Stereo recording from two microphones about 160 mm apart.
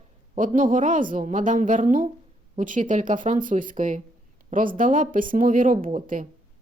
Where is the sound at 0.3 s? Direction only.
55° right (ahead or behind).